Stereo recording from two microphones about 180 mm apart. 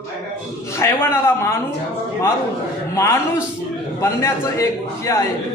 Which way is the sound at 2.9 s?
15° left (ahead or behind).